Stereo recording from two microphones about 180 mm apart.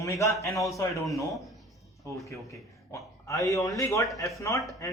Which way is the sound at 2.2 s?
15° left (ahead or behind).